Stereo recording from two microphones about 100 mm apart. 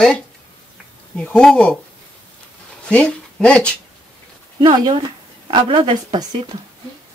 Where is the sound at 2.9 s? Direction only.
10° left (ahead or behind).